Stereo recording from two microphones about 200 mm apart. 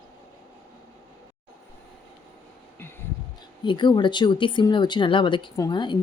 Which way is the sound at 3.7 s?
25° left (ahead or behind).